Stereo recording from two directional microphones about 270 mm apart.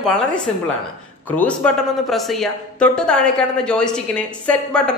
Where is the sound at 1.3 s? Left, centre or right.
Centre.